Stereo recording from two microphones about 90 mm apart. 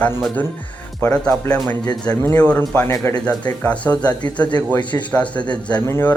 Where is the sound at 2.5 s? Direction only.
25° left (ahead or behind).